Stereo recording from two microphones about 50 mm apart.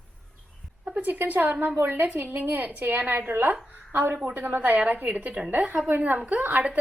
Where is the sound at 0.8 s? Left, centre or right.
Right.